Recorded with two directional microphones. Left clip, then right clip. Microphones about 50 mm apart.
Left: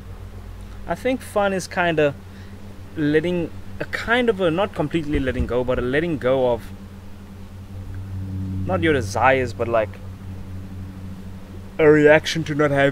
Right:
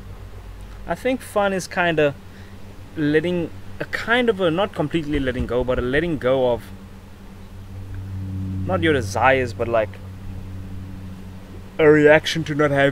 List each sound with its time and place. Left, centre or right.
0.8 s speech: centre
8.6 s speech: centre
11.7 s speech: centre